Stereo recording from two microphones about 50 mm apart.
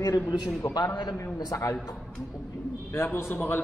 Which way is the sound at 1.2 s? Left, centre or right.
Left.